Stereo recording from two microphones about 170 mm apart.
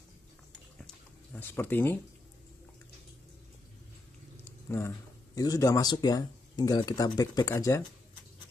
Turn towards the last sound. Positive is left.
turn(degrees=20)  # may be behind; listen again after turning